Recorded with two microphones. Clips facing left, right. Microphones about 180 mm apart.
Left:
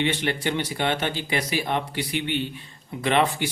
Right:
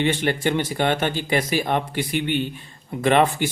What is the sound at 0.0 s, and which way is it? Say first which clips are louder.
Speech: right 4 dB; 45° right (ahead or behind).